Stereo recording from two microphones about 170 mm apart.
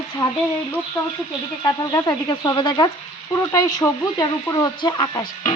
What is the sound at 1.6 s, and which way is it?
Speech, 25° left (ahead or behind).